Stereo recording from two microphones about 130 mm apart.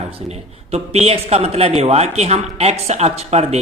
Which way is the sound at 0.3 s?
55° right (ahead or behind).